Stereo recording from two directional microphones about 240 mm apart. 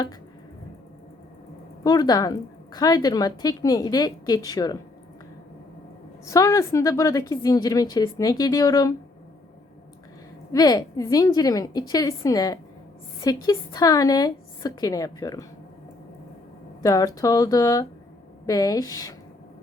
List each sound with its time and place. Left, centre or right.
1.8 s a woman's voice: centre
6.2 s a woman's voice: centre
10.5 s a woman's voice: centre
16.8 s a woman's voice: centre